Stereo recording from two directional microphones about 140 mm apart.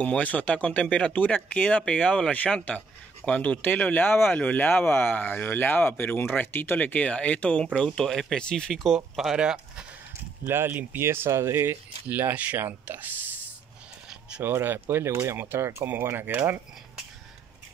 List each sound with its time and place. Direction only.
0.0 s speech: 10° left (ahead or behind)
10.4 s speech: 15° right (ahead or behind)
14.4 s speech: 15° right (ahead or behind)